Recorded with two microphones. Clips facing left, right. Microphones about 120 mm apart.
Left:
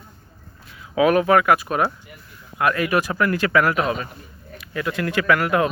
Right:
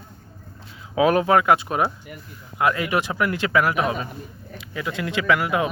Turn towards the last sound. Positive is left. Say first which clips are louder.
# left 2 dB
turn(degrees=-15)  # may be behind; listen again after turning